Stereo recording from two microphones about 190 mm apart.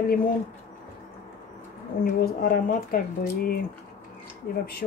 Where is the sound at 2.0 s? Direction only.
50° left (ahead or behind).